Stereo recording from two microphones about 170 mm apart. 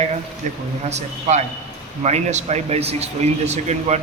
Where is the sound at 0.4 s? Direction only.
45° right (ahead or behind).